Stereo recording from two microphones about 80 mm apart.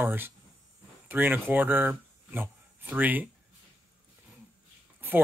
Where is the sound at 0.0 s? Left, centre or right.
Right.